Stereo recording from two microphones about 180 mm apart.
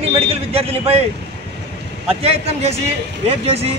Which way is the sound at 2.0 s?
35° right (ahead or behind).